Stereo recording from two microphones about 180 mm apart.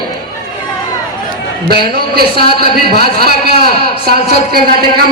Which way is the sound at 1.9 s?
60° right (ahead or behind).